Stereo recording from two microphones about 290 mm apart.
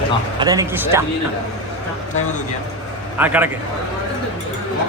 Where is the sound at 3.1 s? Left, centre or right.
Centre.